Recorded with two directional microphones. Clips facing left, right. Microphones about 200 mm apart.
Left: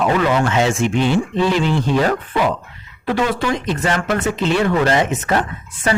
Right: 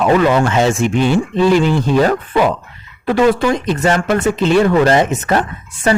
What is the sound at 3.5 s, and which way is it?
Speech, 40° right (ahead or behind).